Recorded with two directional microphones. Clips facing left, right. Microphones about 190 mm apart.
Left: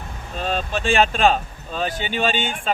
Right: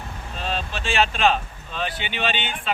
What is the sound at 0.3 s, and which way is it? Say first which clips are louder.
Speech: left 5 dB; 50° left (ahead or behind).